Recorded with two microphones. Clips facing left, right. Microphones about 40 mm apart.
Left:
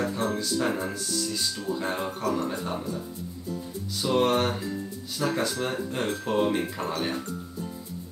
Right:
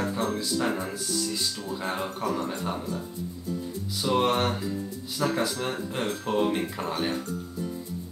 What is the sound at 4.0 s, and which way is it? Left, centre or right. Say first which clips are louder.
Speech: left 1 dB; centre.